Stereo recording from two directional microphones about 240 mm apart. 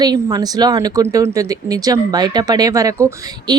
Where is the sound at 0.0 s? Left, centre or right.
Centre.